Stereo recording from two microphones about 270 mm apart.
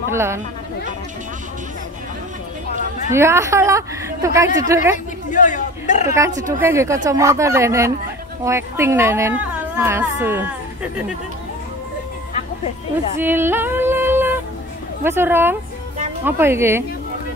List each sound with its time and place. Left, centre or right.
0.1 s speech: centre
3.1 s speech: centre
4.9 s a woman's voice: left
6.0 s speech: centre
13.2 s female singing: centre
15.0 s speech: centre